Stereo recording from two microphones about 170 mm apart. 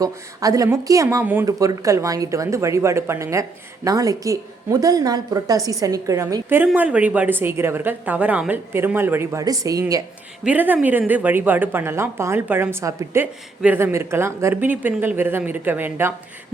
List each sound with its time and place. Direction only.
0.0 s a woman's voice: 20° right (ahead or behind)
10.4 s speech: 10° right (ahead or behind)